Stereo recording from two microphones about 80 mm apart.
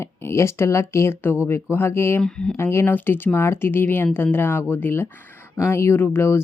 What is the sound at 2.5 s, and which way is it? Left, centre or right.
Speech, left.